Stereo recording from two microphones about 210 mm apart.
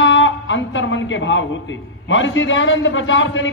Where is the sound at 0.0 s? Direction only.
65° left (ahead or behind).